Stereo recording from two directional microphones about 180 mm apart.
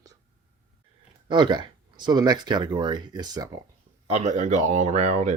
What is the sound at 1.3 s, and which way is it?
Speech, 25° right (ahead or behind).